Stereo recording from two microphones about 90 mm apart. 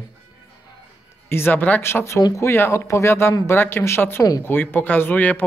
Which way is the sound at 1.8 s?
30° left (ahead or behind).